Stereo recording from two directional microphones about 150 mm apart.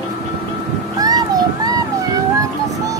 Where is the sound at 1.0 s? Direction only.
25° right (ahead or behind).